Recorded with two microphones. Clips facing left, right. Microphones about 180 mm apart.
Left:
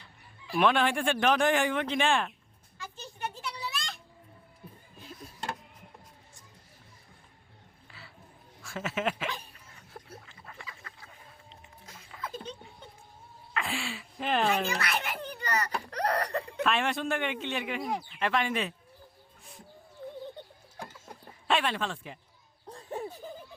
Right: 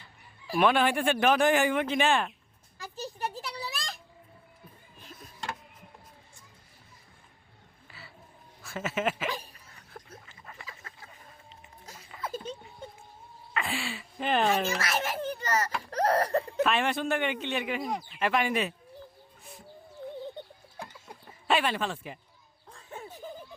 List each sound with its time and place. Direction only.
0.5 s speech: 5° right (ahead or behind)
2.7 s children playing: 35° right (ahead or behind)
7.9 s music: centre (ahead or behind)
8.6 s speech: centre (ahead or behind)
10.2 s duck: 5° right (ahead or behind)
12.3 s giggle: 5° right (ahead or behind)
13.5 s a sound: centre (ahead or behind)
14.8 s a child's voice: 40° right (ahead or behind)
15.9 s a sound: 40° right (ahead or behind)
16.6 s speech: centre (ahead or behind)
21.4 s speech: 5° right (ahead or behind)
22.6 s a sound: 35° left (ahead or behind)